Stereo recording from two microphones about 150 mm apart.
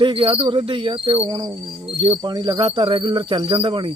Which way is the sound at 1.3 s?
25° right (ahead or behind).